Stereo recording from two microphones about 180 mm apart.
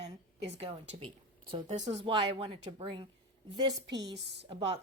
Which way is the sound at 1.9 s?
30° right (ahead or behind).